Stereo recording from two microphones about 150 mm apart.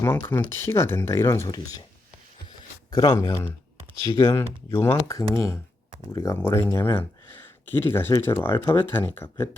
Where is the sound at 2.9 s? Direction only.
25° left (ahead or behind).